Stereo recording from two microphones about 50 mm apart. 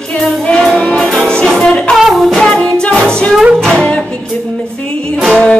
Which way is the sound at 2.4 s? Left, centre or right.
Centre.